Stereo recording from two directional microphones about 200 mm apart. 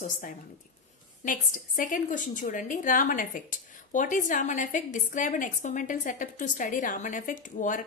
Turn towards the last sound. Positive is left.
turn(degrees=40)  # may be behind; listen again after turning